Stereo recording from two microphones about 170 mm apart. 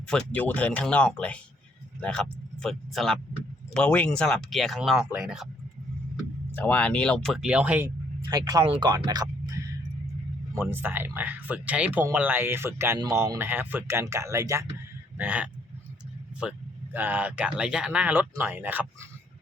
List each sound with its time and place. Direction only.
0.1 s speech: 5° left (ahead or behind)
6.5 s speech: 10° left (ahead or behind); by 7.9 s 5° right (ahead or behind)
8.3 s speech: 20° right (ahead or behind)
15.2 s speech: 10° right (ahead or behind)